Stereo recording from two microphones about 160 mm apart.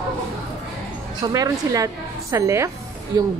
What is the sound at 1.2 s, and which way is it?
Speech, 20° right (ahead or behind).